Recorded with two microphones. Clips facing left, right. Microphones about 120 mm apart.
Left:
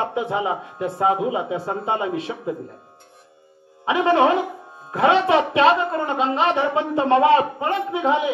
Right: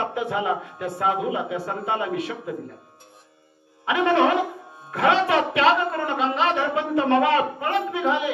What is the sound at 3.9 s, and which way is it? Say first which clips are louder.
A man's voice: left 2 dB; 25° left (ahead or behind).